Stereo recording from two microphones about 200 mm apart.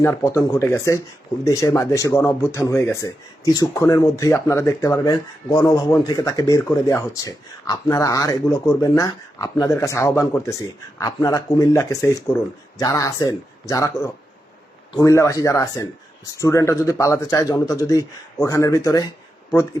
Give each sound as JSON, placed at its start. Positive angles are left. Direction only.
{"t": 0.0, "sound": "speech", "side_deg": 15}